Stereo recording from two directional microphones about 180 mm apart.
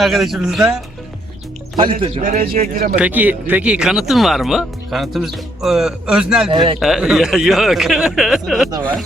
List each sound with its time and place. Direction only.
0.0 s speech: centre (ahead or behind)
1.7 s speech: 30° right (ahead or behind)
2.2 s speech: 50° right (ahead or behind)
2.9 s speech: 10° right (ahead or behind)
6.5 s speech: 25° right (ahead or behind)
6.7 s speech: centre (ahead or behind)